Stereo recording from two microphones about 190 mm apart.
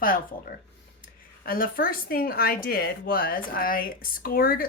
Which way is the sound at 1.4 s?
50° left (ahead or behind).